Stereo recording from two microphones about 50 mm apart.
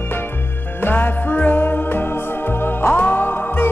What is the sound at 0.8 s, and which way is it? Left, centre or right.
Music, left.